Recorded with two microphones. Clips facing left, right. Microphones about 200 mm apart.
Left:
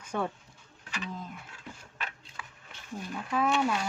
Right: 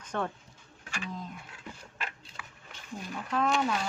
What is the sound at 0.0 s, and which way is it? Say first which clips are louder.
Pigeon: left 1 dB; 10° left (ahead or behind).